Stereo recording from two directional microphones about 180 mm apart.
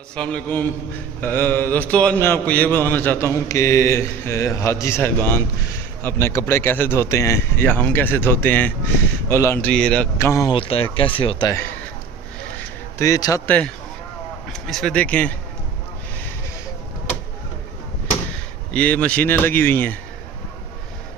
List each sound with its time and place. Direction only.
0.2 s speech: 5° left (ahead or behind)
10.2 s speech: 15° left (ahead or behind)
10.5 s speech: 30° left (ahead or behind)
13.0 s speech: 20° left (ahead or behind)
13.5 s speech: 5° left (ahead or behind)
18.7 s speech: 10° left (ahead or behind)